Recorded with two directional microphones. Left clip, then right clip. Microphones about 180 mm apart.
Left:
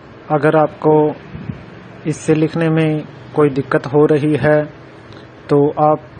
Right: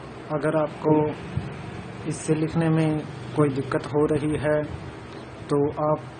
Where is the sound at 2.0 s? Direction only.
35° left (ahead or behind).